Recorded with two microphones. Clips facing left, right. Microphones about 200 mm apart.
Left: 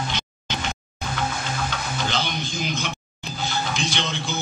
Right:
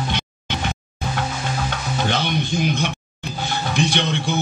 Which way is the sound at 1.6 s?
55° right (ahead or behind).